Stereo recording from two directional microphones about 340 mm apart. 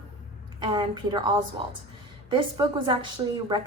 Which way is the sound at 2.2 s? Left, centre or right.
Centre.